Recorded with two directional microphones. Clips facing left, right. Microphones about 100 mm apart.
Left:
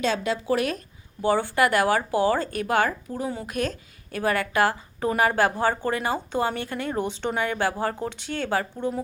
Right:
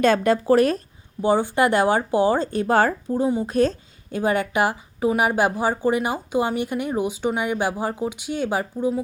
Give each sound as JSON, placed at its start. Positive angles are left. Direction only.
{"t": 0.0, "sound": "speech", "side_deg": -50}
{"t": 1.2, "sound": "speech", "side_deg": -20}
{"t": 3.1, "sound": "a woman's voice", "side_deg": -20}